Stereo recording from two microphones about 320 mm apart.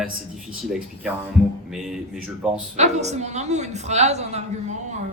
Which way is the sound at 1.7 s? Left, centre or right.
Centre.